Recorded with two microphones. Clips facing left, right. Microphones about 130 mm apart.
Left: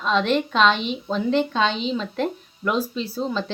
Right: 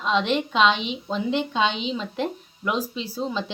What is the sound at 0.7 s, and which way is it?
Speech, 50° left (ahead or behind).